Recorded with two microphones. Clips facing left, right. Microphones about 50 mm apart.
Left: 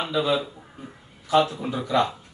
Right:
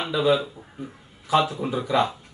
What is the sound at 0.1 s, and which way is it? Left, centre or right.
Speech, centre.